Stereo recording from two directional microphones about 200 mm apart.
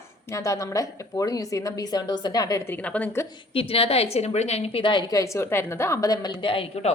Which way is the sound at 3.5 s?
30° left (ahead or behind).